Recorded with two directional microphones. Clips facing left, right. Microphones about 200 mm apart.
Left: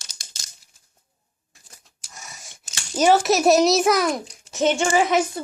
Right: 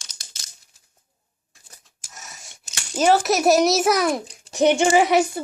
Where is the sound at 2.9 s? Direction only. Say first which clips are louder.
Left 1 dB; centre (ahead or behind).